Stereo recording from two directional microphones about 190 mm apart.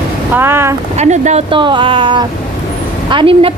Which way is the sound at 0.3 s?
10° right (ahead or behind).